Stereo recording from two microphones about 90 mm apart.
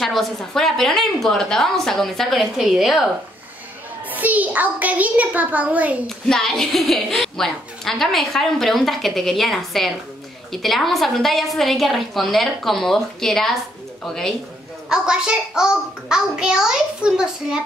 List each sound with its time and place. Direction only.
0.0 s a child's voice: centre (ahead or behind)
4.1 s a child's voice: 20° right (ahead or behind)
6.0 s a child's voice: 5° left (ahead or behind)
14.9 s a child's voice: 10° right (ahead or behind)